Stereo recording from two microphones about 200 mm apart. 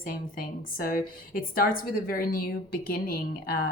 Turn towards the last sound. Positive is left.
turn(degrees=45)  # may be behind; listen again after turning